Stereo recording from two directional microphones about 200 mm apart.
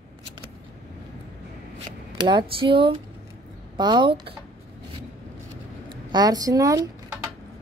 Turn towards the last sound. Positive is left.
turn(degrees=-15)  # may be behind; listen again after turning